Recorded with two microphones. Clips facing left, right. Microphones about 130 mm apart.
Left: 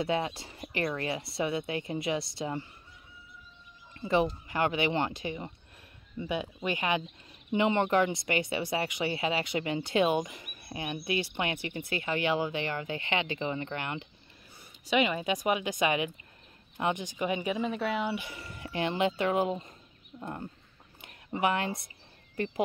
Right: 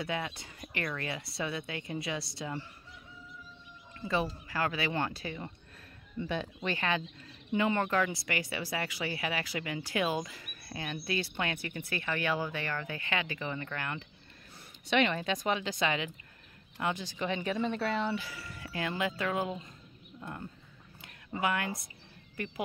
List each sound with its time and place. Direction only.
0.0 s speech: 25° left (ahead or behind)
4.0 s speech: 25° left (ahead or behind)
14.9 s speech: 5° left (ahead or behind)
18.2 s speech: 25° left (ahead or behind)
21.0 s a sound: 25° left (ahead or behind)